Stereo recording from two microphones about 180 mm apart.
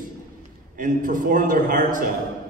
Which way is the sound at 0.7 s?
50° right (ahead or behind).